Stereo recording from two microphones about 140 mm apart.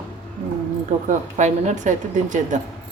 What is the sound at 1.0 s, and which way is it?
A woman's voice, 60° right (ahead or behind).